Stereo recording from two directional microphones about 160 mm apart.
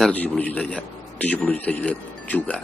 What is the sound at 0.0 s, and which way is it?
A man's voice, 10° left (ahead or behind).